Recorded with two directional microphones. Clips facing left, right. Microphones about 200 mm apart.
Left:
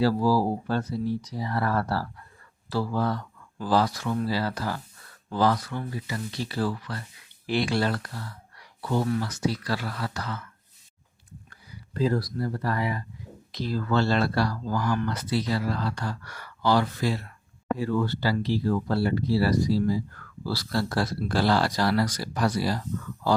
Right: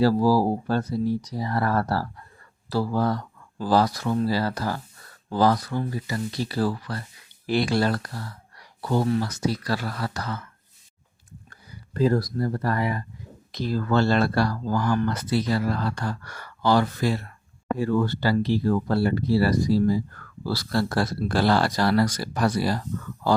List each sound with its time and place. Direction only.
0.0 s speech: 40° right (ahead or behind)
11.9 s speech: 45° right (ahead or behind)